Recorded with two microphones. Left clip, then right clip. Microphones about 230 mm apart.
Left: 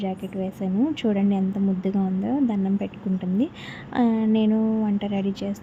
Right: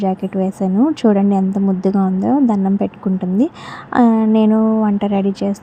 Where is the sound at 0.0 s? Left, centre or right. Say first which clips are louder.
Right 11 dB; right.